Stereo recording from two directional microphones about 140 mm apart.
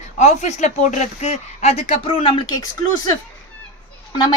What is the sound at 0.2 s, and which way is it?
Speech, 55° left (ahead or behind).